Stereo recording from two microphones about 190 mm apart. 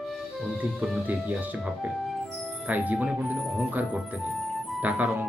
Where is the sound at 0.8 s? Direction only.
5° right (ahead or behind).